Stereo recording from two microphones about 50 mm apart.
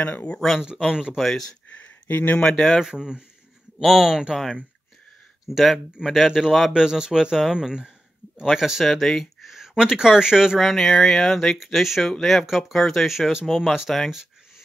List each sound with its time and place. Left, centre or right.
0.0 s speech: left
0.6 s speech: centre
1.1 s speech: centre
1.7 s a sound: left
2.3 s speech: centre
2.8 s speech: centre
5.5 s speech: centre
6.7 s speech: centre
8.8 s speech: centre
10.6 s speech: centre
11.5 s speech: centre
13.5 s speech: centre